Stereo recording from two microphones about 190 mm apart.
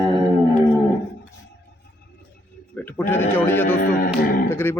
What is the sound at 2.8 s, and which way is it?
Speech, 10° left (ahead or behind).